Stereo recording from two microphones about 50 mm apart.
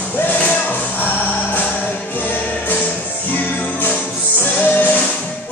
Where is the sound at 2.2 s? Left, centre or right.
Left.